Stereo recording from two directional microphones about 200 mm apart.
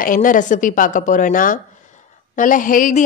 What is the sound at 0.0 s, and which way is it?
A woman's voice, 45° left (ahead or behind).